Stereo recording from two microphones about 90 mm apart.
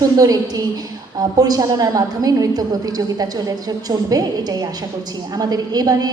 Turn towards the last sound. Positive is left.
turn(degrees=-45)  # may be behind; listen again after turning